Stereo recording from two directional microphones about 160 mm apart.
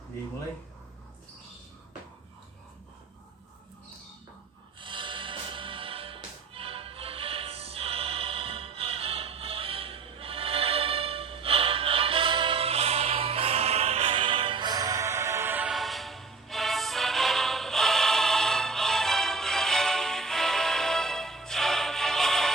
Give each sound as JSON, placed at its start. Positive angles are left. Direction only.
{"t": 4.8, "sound": "music", "side_deg": -30}